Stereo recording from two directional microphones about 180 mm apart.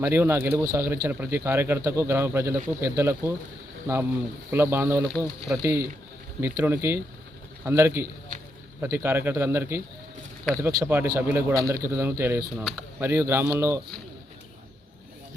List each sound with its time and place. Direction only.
0.0 s speech: 15° right (ahead or behind)